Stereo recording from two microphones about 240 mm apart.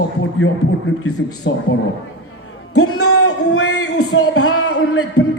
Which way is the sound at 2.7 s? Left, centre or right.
Left.